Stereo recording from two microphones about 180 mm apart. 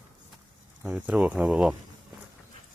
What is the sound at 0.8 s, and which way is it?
Speech, 10° right (ahead or behind).